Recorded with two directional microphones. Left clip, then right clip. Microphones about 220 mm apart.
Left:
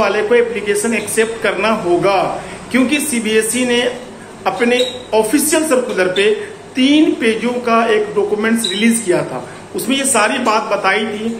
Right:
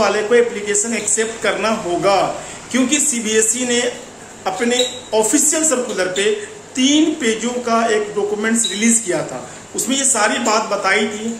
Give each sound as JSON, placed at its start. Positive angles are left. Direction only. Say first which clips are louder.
{"t": 0.0, "sound": "speech", "louder": "left 1 dB", "side_deg": -15}